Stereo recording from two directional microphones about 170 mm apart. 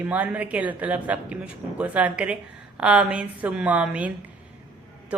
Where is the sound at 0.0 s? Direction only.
10° right (ahead or behind).